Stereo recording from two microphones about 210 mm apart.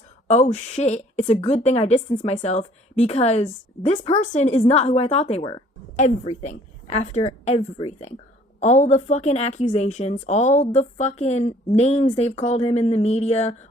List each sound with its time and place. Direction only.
0.3 s a woman's voice: 35° left (ahead or behind)